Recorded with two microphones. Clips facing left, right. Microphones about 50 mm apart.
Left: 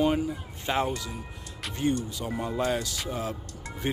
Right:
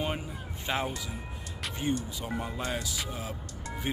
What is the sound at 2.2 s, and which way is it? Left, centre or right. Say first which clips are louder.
Speech: left 5 dB; centre.